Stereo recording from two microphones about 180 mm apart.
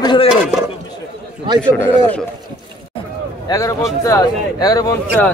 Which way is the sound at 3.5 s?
20° left (ahead or behind).